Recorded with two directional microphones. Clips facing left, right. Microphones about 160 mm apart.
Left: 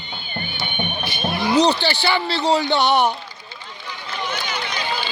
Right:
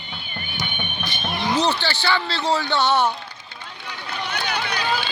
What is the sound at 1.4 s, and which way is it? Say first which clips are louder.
Speech: left 4 dB; 15° left (ahead or behind).